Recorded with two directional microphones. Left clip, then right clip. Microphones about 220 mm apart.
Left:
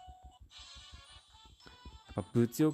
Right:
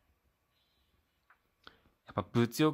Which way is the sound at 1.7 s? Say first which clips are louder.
Right 2 dB; 10° left (ahead or behind).